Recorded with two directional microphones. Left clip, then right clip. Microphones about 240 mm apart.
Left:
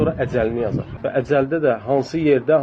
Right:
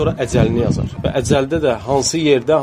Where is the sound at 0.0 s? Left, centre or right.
Right.